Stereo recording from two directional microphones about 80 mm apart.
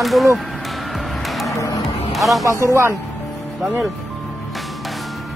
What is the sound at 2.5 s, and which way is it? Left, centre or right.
Speech, right.